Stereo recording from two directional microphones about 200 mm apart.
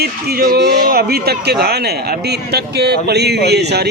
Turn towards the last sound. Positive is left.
turn(degrees=-55)  # may be behind; listen again after turning